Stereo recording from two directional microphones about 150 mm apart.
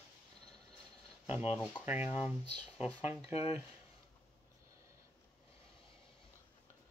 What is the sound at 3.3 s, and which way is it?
Speech, 45° left (ahead or behind).